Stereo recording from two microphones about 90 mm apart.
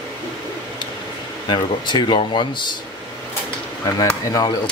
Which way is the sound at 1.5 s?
55° left (ahead or behind).